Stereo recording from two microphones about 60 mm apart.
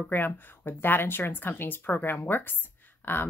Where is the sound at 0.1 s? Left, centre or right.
Left.